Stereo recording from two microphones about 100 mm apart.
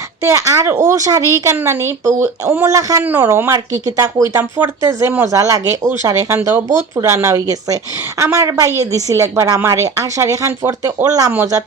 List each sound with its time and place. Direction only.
0.3 s a woman's voice: 35° right (ahead or behind)
3.1 s a woman's voice: 25° right (ahead or behind)